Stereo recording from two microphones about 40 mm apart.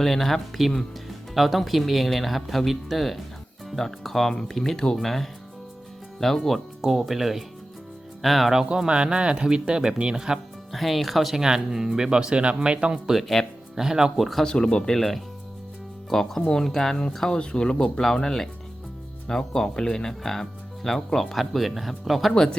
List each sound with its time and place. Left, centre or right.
0.0 s speech: centre
6.8 s speech: centre
8.5 s speech: centre
8.9 s speech: right
10.2 s speech: centre
10.7 s speech: centre
11.3 s speech: centre
13.1 s speech: centre
14.2 s speech: centre
14.4 s speech: left
14.8 s speech: centre
17.3 s speech: left
21.3 s speech: centre
22.3 s speech: centre